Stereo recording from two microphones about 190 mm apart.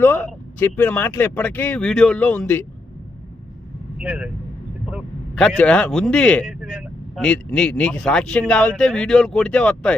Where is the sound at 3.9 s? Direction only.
5° right (ahead or behind).